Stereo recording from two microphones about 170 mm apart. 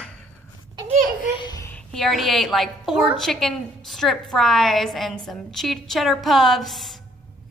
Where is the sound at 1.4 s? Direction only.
25° left (ahead or behind).